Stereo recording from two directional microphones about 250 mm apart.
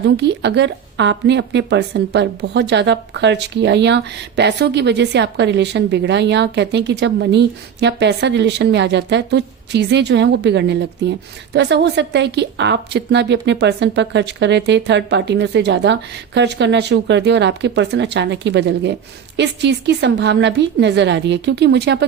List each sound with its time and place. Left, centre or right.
0.2 s a woman's voice: right